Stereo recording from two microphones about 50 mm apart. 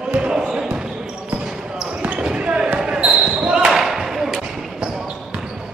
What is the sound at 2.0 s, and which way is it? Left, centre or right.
Basketball bounce, right.